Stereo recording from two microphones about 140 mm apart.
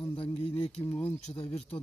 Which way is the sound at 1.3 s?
45° left (ahead or behind).